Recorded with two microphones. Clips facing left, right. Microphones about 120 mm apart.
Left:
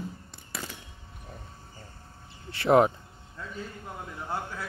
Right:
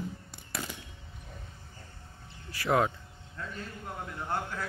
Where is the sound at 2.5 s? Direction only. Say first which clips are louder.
Left 6 dB; 25° left (ahead or behind).